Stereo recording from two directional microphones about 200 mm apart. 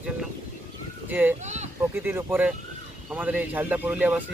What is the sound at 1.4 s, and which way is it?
Speech, 35° right (ahead or behind).